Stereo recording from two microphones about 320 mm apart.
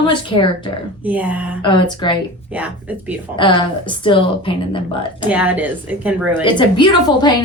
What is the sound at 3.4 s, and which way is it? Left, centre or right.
A woman's voice, centre.